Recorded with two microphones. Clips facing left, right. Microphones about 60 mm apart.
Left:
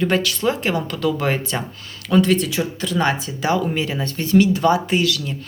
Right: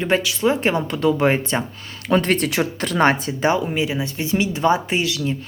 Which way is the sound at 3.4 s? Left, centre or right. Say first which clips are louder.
Even; right.